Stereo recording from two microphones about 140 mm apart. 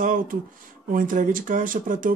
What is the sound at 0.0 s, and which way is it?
Speech, 75° right (ahead or behind).